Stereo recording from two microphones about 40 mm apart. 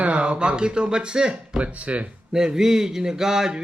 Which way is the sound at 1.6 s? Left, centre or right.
Right.